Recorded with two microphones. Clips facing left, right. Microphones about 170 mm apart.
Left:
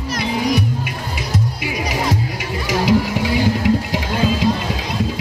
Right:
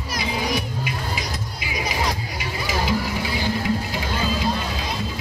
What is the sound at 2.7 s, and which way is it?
Music, 70° left (ahead or behind).